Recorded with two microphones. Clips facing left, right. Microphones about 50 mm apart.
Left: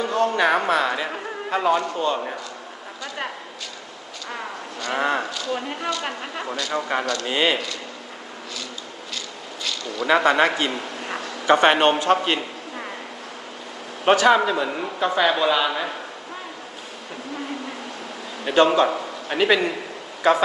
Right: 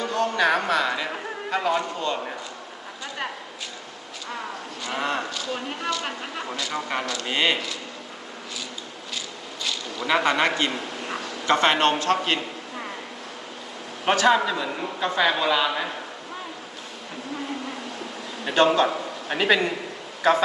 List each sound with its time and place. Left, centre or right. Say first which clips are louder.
0.0 s a man's voice: left 2 dB; centre
2.0 s speech: left 4 dB; left
4.9 s speech: left 4 dB; left
5.3 s speech: left 3 dB; centre
7.3 s speech: left 1 dB; centre
10.2 s a man's voice: left 2 dB; centre
14.0 s speech: left 3 dB; centre
18.4 s speech: left 2 dB; centre
19.3 s speech: left 2 dB; centre